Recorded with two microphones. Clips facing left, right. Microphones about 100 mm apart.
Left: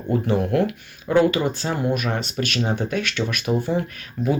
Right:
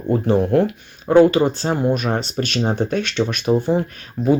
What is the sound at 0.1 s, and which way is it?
Speech, 30° right (ahead or behind).